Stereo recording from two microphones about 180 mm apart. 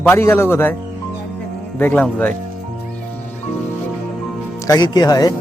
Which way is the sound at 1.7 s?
10° left (ahead or behind).